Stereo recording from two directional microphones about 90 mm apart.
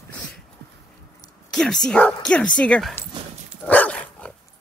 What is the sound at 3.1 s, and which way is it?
Dog, 65° right (ahead or behind).